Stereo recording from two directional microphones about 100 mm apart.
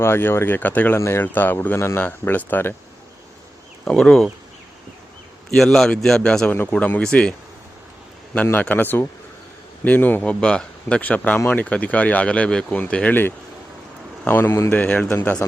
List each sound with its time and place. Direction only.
0.0 s speech: 25° left (ahead or behind)
0.9 s speech: 25° left (ahead or behind)
3.8 s speech: 10° left (ahead or behind)
5.5 s a man's voice: 5° left (ahead or behind)
8.6 s speech: 20° left (ahead or behind)